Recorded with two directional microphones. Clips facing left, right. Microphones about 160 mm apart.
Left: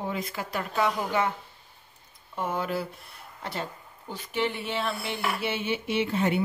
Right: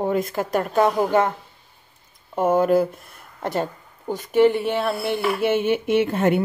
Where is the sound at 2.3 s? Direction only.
50° right (ahead or behind).